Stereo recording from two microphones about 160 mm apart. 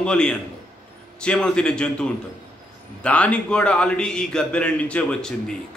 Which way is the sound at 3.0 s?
10° left (ahead or behind).